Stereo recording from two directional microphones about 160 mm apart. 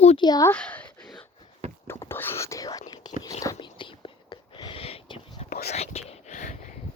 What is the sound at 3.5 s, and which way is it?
Whispering, 30° left (ahead or behind).